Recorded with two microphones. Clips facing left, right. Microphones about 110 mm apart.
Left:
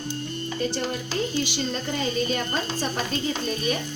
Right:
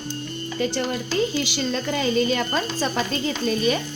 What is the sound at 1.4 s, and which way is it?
A woman's voice, 90° right.